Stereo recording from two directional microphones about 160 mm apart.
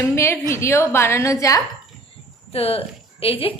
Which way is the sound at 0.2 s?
15° left (ahead or behind).